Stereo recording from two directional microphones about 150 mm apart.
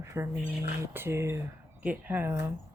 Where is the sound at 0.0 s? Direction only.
20° right (ahead or behind).